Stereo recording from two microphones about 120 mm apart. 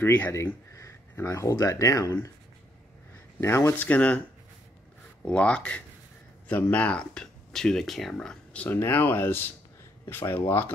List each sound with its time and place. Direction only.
0.0 s speech: 15° left (ahead or behind)
3.3 s speech: 20° left (ahead or behind)
5.2 s speech: 10° left (ahead or behind)
8.6 s speech: 20° left (ahead or behind)